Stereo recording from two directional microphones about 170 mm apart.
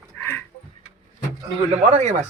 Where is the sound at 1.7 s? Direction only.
40° right (ahead or behind).